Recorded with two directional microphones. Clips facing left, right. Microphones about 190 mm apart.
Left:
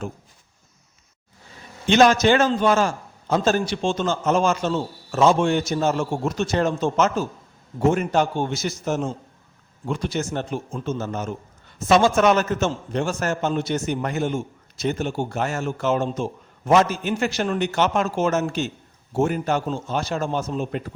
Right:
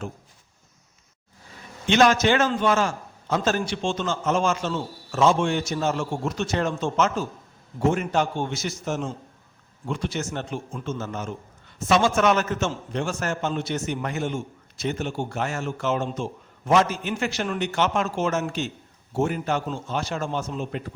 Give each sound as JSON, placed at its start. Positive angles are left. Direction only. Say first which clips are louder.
{"t": 1.9, "sound": "a man's voice", "louder": "left 3 dB", "side_deg": 35}